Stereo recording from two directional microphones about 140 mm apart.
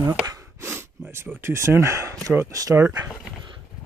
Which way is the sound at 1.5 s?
20° right (ahead or behind).